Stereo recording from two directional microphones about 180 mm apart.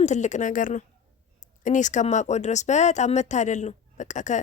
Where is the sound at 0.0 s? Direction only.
40° left (ahead or behind).